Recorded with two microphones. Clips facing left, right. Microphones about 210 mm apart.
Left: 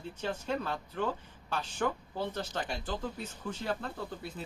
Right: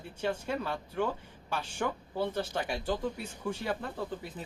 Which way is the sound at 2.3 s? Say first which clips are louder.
Right 3 dB; 10° right (ahead or behind).